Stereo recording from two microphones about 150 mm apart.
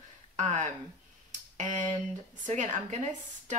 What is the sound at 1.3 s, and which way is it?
Tick, 55° right (ahead or behind).